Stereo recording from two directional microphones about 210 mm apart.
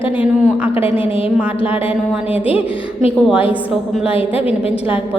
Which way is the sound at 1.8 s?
10° right (ahead or behind).